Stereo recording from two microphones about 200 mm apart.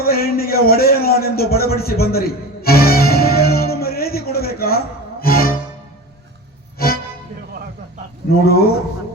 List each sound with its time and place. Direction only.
0.0 s a sound: 50° left (ahead or behind)
5.2 s music: 50° left (ahead or behind)
6.7 s music: 50° left (ahead or behind)
8.3 s speech: 50° left (ahead or behind)